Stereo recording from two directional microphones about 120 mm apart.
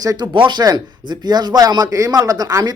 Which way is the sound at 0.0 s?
30° right (ahead or behind).